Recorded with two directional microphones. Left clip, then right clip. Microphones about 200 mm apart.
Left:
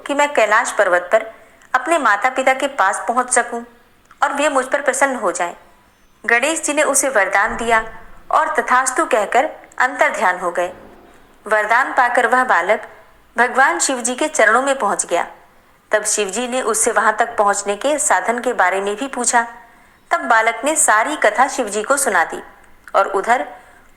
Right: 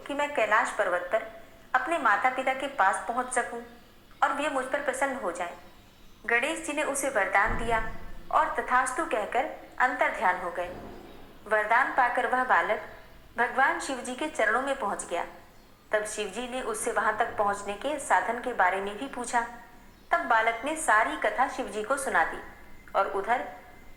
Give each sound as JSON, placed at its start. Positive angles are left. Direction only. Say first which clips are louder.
{"t": 0.0, "sound": "a woman's voice", "louder": "left 13 dB", "side_deg": 40}